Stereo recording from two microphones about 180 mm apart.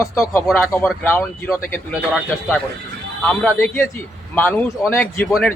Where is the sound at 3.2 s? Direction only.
5° left (ahead or behind).